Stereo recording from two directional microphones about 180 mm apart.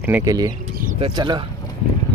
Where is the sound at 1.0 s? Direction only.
25° right (ahead or behind).